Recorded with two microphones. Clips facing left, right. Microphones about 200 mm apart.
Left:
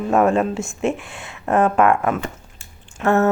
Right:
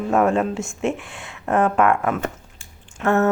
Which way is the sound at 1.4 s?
25° left (ahead or behind).